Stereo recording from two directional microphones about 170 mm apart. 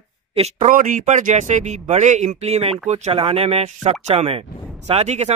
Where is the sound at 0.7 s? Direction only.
50° right (ahead or behind).